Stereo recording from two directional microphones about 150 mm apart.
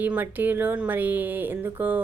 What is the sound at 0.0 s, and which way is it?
Speech, 10° right (ahead or behind).